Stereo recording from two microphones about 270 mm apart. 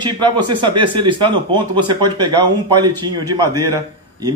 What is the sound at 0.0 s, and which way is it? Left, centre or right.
Speech, centre.